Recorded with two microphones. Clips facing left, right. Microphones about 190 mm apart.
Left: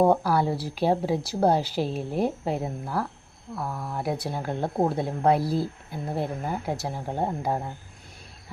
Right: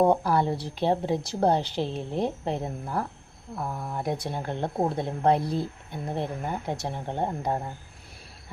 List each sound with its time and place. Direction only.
0.0 s speech: 5° left (ahead or behind)